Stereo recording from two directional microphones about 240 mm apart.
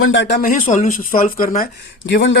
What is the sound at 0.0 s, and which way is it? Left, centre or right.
Speech, left.